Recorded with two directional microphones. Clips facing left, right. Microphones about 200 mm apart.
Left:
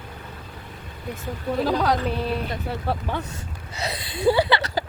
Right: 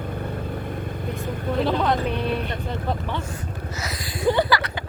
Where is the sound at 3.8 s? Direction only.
30° left (ahead or behind).